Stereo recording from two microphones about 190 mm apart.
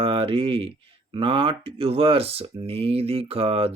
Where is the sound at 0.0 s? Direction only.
30° right (ahead or behind).